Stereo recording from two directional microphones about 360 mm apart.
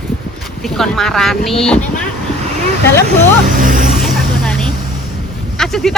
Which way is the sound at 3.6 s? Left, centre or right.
Right.